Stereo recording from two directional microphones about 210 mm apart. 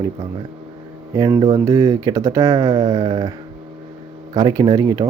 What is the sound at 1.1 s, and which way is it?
Speech, 20° right (ahead or behind).